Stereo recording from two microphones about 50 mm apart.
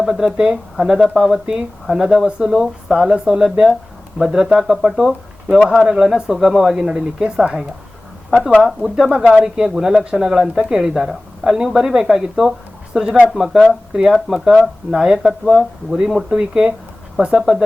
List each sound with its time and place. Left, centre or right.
0.0 s speech: centre
0.3 s speech: right
5.8 s speech: centre
8.6 s speech: centre